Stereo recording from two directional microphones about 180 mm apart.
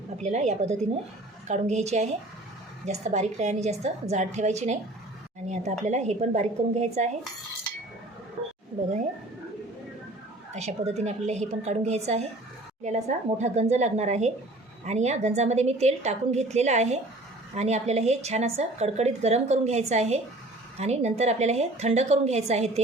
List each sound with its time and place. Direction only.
0.2 s a woman's voice: 40° right (ahead or behind)
5.8 s a woman's voice: 40° right (ahead or behind)
10.5 s a woman's voice: 40° right (ahead or behind)